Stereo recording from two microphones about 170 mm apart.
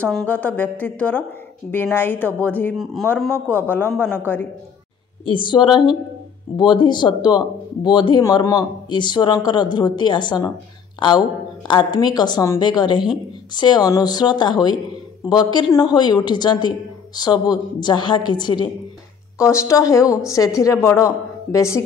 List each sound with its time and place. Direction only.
0.0 s speech: 5° left (ahead or behind)
5.2 s speech: 30° left (ahead or behind)